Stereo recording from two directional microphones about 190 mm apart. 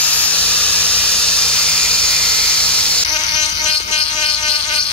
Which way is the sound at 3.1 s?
20° left (ahead or behind).